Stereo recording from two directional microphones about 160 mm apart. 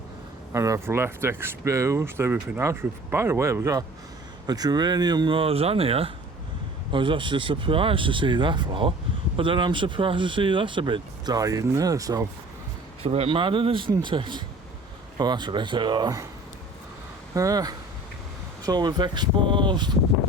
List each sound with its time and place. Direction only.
0.5 s speech: 20° right (ahead or behind)
13.0 s speech: 35° right (ahead or behind)
17.3 s speech: 20° right (ahead or behind)